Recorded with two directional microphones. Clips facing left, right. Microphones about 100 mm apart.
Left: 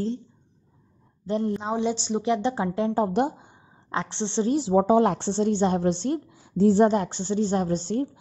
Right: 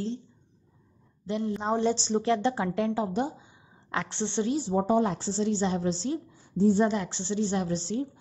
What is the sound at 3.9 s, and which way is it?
Speech, 25° left (ahead or behind).